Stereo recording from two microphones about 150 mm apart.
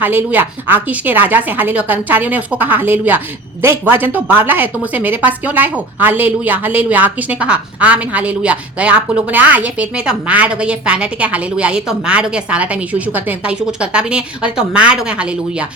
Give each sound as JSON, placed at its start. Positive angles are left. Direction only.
{"t": 0.0, "sound": "a woman's voice", "side_deg": -10}